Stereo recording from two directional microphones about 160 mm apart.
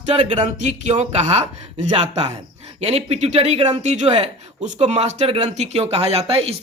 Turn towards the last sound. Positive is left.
turn(degrees=-40)  # may be behind; listen again after turning